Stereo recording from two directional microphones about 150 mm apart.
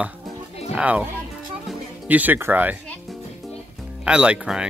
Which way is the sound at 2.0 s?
10° right (ahead or behind).